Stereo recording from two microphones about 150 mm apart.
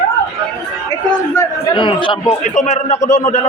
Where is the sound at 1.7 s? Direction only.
35° left (ahead or behind).